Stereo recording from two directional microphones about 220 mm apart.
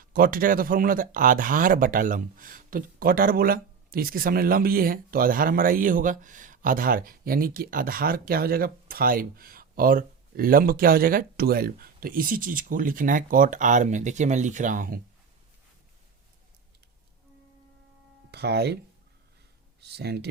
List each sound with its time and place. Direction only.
0.0 s speech: 40° right (ahead or behind)
18.3 s speech: 50° right (ahead or behind)
19.8 s speech: 50° right (ahead or behind)